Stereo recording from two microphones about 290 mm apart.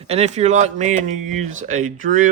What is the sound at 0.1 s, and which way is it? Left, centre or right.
Speech, right.